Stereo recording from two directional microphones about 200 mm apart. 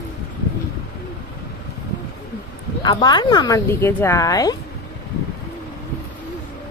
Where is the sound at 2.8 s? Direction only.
20° left (ahead or behind).